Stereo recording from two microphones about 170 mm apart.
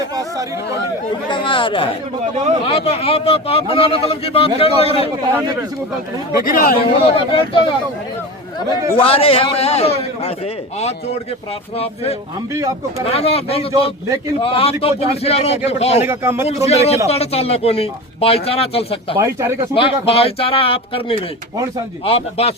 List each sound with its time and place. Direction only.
0.2 s speech: 20° right (ahead or behind)
1.3 s speech: 30° left (ahead or behind)
2.3 s speech: 45° right (ahead or behind)
2.6 s speech: 35° left (ahead or behind)
6.3 s speech: 60° left (ahead or behind)
7.0 s speech: 30° left (ahead or behind)
9.0 s speech: 35° left (ahead or behind)
13.1 s speech: 35° left (ahead or behind)
16.0 s speech: 15° right (ahead or behind)
16.6 s speech: 40° left (ahead or behind)
19.1 s speech: 20° right (ahead or behind)
19.7 s speech: 35° left (ahead or behind)